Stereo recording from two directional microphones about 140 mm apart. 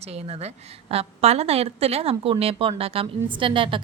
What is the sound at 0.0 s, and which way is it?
A woman's voice, 50° right (ahead or behind).